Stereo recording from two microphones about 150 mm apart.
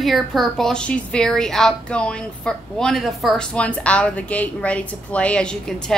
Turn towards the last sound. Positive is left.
turn(degrees=5)  # may be behind; listen again after turning